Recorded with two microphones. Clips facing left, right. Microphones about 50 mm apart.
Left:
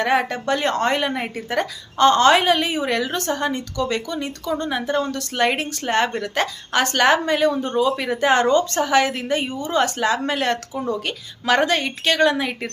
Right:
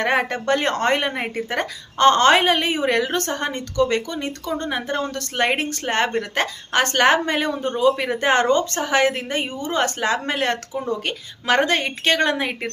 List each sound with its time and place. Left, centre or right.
0.0 s speech: right
1.1 s a woman's voice: right